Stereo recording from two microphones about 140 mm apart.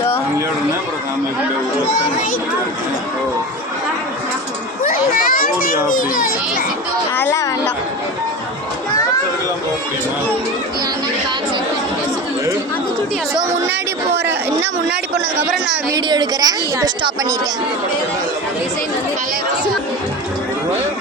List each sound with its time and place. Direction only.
4.8 s children playing: 80° left
5.9 s a child's voice: 85° left
7.2 s a woman's voice: 20° left (ahead or behind)
15.4 s a woman's voice: 5° right (ahead or behind)
15.9 s a woman's voice: 30° right (ahead or behind)